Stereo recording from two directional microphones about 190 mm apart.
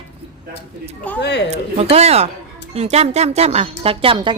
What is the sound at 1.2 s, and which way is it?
Speech, 60° left (ahead or behind).